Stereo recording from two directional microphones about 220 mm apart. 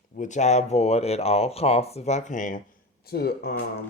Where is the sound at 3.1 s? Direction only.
45° left (ahead or behind).